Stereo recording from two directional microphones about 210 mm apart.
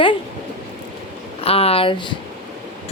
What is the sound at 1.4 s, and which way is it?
Speech, 30° left (ahead or behind).